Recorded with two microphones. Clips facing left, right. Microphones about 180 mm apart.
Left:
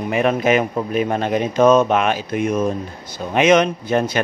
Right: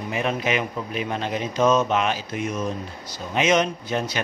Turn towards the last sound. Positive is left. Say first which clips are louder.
# left 7 dB
turn(degrees=55)  # may be behind; listen again after turning